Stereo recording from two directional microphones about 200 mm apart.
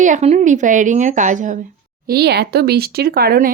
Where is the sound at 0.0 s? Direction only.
35° right (ahead or behind).